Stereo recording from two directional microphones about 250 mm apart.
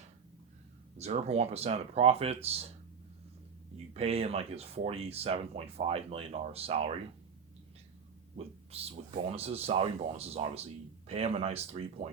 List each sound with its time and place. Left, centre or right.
0.9 s speech: right
3.9 s speech: right
8.7 s speech: right